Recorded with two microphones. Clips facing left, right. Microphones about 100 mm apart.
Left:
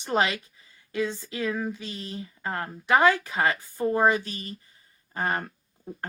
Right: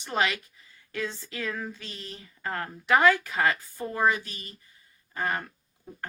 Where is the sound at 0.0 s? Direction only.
25° left (ahead or behind).